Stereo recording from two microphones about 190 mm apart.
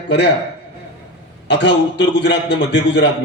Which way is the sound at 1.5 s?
65° left (ahead or behind).